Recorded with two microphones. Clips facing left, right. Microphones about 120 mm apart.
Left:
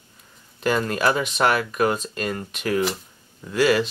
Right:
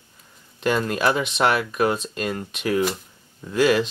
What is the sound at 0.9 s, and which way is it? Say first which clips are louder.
Speech: even; 15° right (ahead or behind).